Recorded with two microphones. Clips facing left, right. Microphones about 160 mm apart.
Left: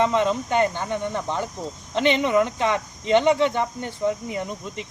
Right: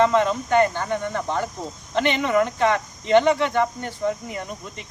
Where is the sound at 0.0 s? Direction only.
15° left (ahead or behind).